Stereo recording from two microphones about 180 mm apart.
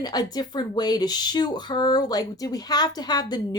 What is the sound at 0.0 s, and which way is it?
Speech, 20° left (ahead or behind).